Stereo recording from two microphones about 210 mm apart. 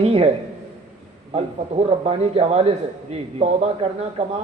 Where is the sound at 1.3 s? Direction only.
30° right (ahead or behind).